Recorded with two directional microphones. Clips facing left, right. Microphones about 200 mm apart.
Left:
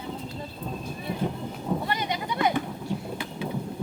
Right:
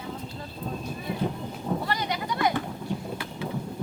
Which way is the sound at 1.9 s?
20° left (ahead or behind).